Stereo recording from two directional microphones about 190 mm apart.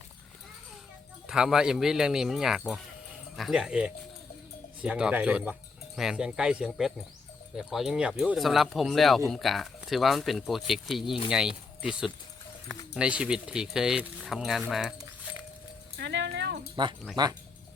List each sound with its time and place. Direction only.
1.3 s speech: 5° right (ahead or behind)
16.0 s music: 65° right (ahead or behind)
16.8 s speech: 25° right (ahead or behind)